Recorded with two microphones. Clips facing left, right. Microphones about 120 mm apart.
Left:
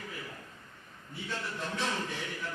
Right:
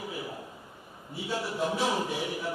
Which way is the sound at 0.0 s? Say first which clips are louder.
Right 6 dB; 15° right (ahead or behind).